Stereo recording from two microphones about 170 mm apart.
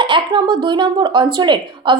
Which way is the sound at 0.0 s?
25° right (ahead or behind).